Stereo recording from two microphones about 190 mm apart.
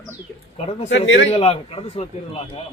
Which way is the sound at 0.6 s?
35° left (ahead or behind).